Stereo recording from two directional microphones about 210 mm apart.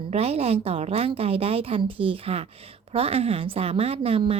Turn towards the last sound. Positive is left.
turn(degrees=-25)  # may be behind; listen again after turning